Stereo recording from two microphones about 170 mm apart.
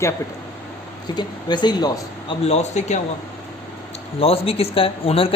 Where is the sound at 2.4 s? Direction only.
40° left (ahead or behind).